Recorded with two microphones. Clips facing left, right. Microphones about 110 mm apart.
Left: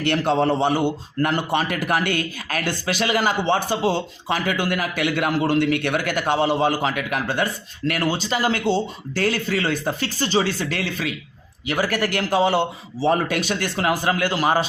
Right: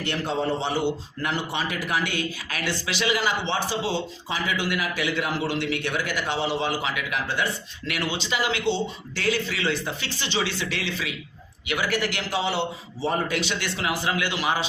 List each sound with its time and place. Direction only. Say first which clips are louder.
0.0 s a man's voice: left 7 dB; 65° left (ahead or behind)
0.7 s a man's voice: left 4 dB; 50° left (ahead or behind)
13.0 s speech: left 6 dB; 90° left
13.3 s a man's voice: left 4 dB; 45° left (ahead or behind)